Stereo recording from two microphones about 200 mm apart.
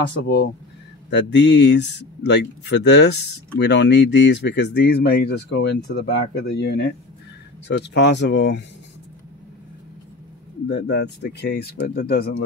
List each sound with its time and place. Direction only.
1.1 s speech: 60° left (ahead or behind)
10.7 s speech: 55° left (ahead or behind)